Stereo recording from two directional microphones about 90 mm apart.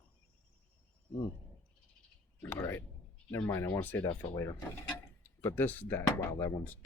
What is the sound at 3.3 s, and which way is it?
Speech, 25° left (ahead or behind).